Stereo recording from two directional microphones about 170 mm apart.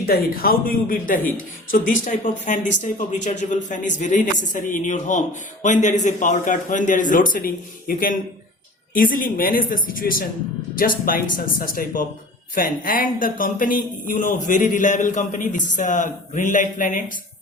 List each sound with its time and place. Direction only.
0.0 s a woman's voice: 60° left (ahead or behind)